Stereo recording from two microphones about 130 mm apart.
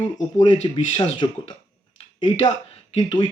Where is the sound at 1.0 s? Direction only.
40° left (ahead or behind).